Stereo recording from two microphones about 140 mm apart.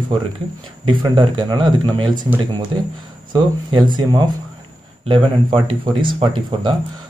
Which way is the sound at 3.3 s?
30° right (ahead or behind).